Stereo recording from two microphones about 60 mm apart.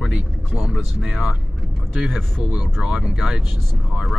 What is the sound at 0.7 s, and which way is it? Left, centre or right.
Speech, centre.